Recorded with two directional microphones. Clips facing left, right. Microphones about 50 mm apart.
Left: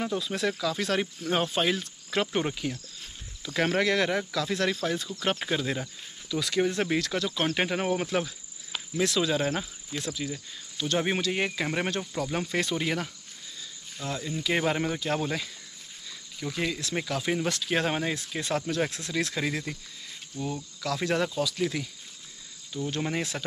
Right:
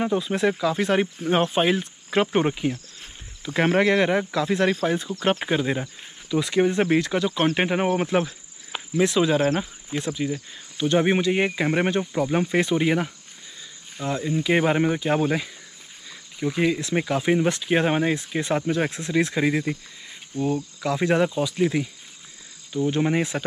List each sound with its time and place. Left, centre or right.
0.0 s speech: right